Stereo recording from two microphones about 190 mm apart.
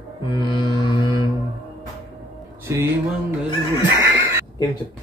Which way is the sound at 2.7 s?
15° right (ahead or behind).